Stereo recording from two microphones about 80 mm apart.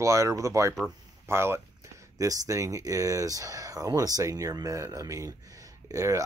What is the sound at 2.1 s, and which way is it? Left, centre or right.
Speech, right.